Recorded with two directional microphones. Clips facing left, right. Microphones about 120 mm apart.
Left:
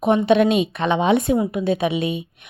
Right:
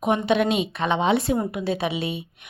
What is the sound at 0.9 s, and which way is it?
Speech, 20° left (ahead or behind).